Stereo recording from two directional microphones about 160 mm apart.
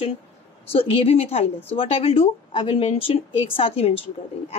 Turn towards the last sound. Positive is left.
turn(degrees=40)  # may be behind; listen again after turning